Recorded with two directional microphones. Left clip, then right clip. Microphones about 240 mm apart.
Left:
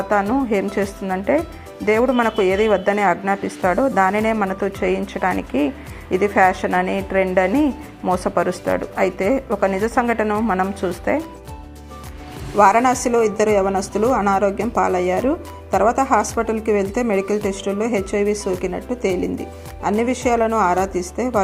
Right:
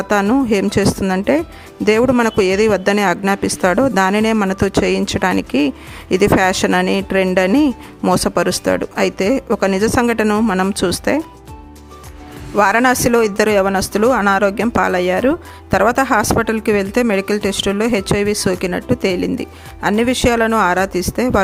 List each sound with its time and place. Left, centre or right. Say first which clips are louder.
0.1 s speech: right 4 dB; right
12.5 s speech: right 1 dB; right